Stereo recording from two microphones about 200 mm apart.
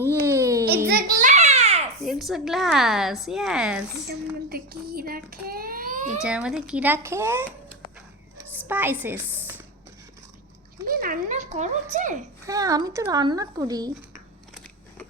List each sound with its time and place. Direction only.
0.0 s a sound: 15° right (ahead or behind)
0.9 s a sound: 45° right (ahead or behind)
2.0 s a woman's voice: centre (ahead or behind)
4.1 s a child's voice: 50° right (ahead or behind)
6.2 s speech: 5° right (ahead or behind)
10.8 s speech: 45° right (ahead or behind)
12.5 s speech: 15° right (ahead or behind)